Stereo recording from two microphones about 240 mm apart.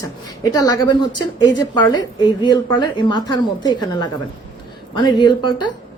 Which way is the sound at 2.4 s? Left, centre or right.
Centre.